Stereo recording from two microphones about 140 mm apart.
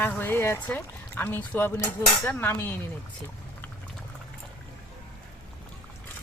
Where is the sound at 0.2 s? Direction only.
15° left (ahead or behind).